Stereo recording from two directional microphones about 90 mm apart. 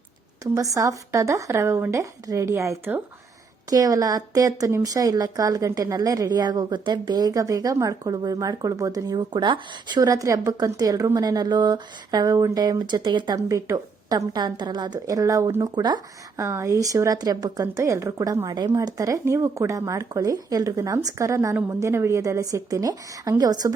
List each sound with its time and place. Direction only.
0.5 s a woman's voice: 40° right (ahead or behind)
3.7 s a woman's voice: 40° right (ahead or behind); by 10.0 s 60° right (ahead or behind)
10.0 s speech: 40° right (ahead or behind)
13.3 s a woman's voice: 40° right (ahead or behind)
14.3 s speech: 55° right (ahead or behind); by 15.5 s 40° right (ahead or behind)
15.6 s speech: 55° right (ahead or behind)
16.4 s a woman's voice: 35° right (ahead or behind)
17.7 s a woman's voice: 35° right (ahead or behind)